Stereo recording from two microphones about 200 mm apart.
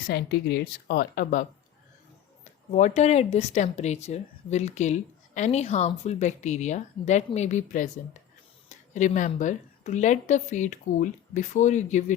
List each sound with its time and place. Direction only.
0.1 s speech: 55° left (ahead or behind); by 12.1 s 35° left (ahead or behind)